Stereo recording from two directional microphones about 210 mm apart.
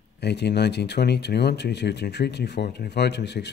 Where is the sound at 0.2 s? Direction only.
55° left (ahead or behind).